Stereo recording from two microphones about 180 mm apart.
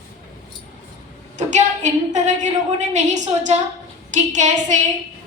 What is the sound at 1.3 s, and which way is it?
A woman's voice, 40° right (ahead or behind).